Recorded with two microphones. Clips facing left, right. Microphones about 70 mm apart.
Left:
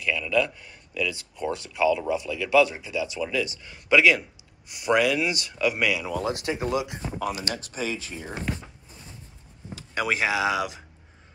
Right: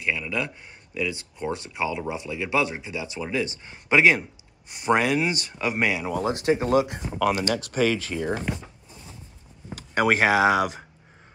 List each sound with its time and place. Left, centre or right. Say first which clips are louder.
0.0 s speech: left 3 dB; right
7.2 s speech: right 8 dB; right
9.8 s speech: right 5 dB; right